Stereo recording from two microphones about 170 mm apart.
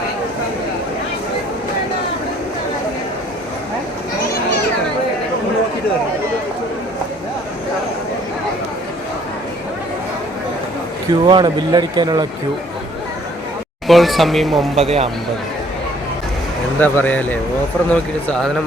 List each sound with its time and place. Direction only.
11.1 s speech: 25° right (ahead or behind)
13.8 s speech: centre (ahead or behind)
14.8 s speech: 35° right (ahead or behind)
16.8 s speech: 10° left (ahead or behind)